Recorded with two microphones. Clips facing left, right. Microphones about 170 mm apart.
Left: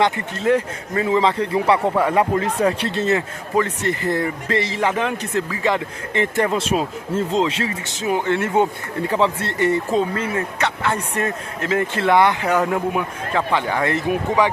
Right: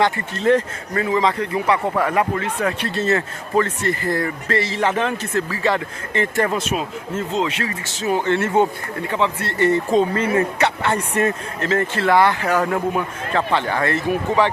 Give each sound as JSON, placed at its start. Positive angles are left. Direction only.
{"t": 0.0, "sound": "speech", "side_deg": 15}
{"t": 1.0, "sound": "a man's voice", "side_deg": 25}
{"t": 2.9, "sound": "speech", "side_deg": 15}
{"t": 6.6, "sound": "a man's voice", "side_deg": 30}
{"t": 8.0, "sound": "speech", "side_deg": 10}
{"t": 9.0, "sound": "a man's voice", "side_deg": 30}
{"t": 9.5, "sound": "speech", "side_deg": 15}
{"t": 11.6, "sound": "speech", "side_deg": 10}